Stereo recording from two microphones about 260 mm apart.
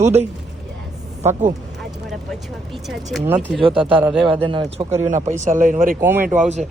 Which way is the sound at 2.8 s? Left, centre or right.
Centre.